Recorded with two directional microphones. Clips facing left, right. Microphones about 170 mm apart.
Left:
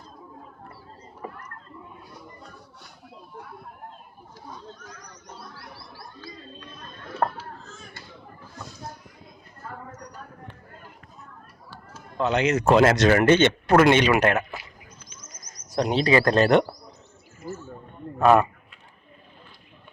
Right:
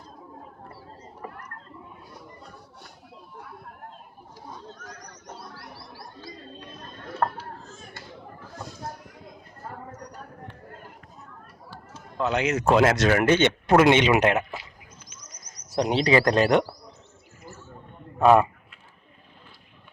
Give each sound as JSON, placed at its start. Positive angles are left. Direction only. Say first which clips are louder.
{"t": 12.1, "sound": "speech", "louder": "left 2 dB", "side_deg": -5}
{"t": 13.7, "sound": "speech", "louder": "even", "side_deg": -20}
{"t": 15.8, "sound": "speech", "louder": "even", "side_deg": -15}
{"t": 17.4, "sound": "speech", "louder": "left 10 dB", "side_deg": 10}
{"t": 18.2, "sound": "speech", "louder": "even", "side_deg": -20}